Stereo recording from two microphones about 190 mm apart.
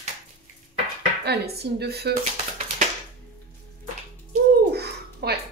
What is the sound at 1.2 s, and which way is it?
Speech, 55° right (ahead or behind).